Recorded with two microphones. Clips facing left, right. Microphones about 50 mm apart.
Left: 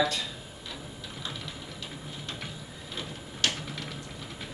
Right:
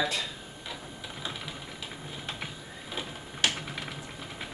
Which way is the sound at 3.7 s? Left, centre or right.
Centre.